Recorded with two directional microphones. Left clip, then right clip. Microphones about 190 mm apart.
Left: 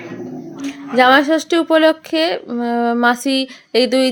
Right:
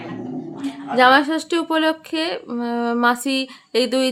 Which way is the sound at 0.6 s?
20° left (ahead or behind).